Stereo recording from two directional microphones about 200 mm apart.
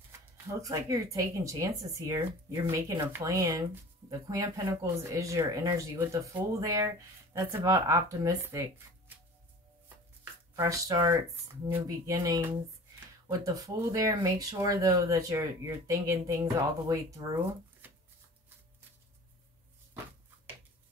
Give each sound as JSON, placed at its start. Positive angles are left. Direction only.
{"t": 0.5, "sound": "speech", "side_deg": -15}
{"t": 10.5, "sound": "speech", "side_deg": -15}